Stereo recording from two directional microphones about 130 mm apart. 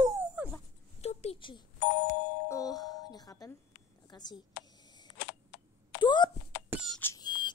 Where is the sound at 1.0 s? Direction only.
55° left (ahead or behind).